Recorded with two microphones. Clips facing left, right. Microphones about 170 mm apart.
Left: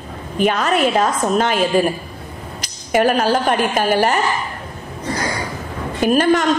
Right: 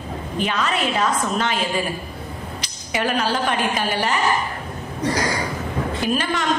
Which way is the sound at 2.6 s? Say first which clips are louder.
Left 9 dB; 45° left (ahead or behind).